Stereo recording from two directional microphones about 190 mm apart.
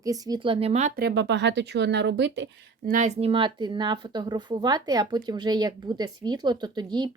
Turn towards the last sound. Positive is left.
turn(degrees=-25)  # may be behind; listen again after turning